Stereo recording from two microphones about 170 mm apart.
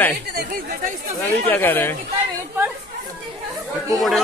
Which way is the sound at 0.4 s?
55° right (ahead or behind).